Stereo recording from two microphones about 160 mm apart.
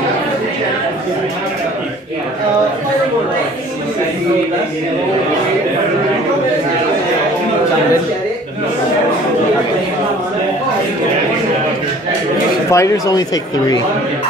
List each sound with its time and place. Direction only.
12.7 s speech: 20° left (ahead or behind)